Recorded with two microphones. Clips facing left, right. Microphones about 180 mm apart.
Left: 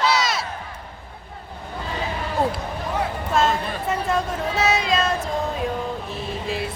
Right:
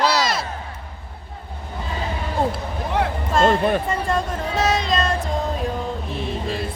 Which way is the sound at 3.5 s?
55° right (ahead or behind).